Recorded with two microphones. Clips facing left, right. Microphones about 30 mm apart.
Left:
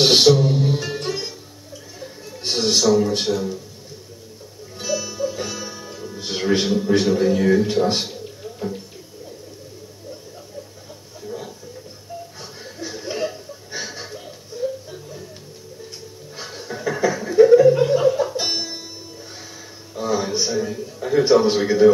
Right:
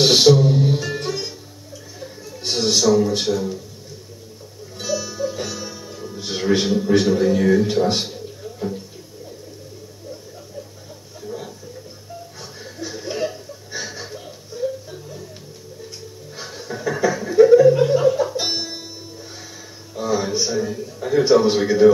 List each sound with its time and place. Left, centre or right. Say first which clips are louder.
0.0 s music: even; left
0.3 s music: right 2 dB; centre
2.3 s a sound: even; centre
3.3 s a man's voice: right 1 dB; centre
4.8 s music: even; centre
6.7 s a man's voice: right 1 dB; centre
7.7 s a sound: even; centre
11.2 s a sound: even; centre
12.4 s chuckle: right 1 dB; centre
14.0 s laughter: right 1 dB; centre
16.3 s chuckle: even; centre
20.0 s a sound: right 1 dB; centre
21.3 s a man's voice: right 1 dB; centre